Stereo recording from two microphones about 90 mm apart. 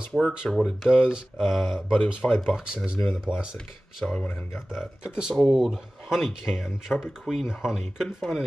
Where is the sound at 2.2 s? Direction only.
10° left (ahead or behind).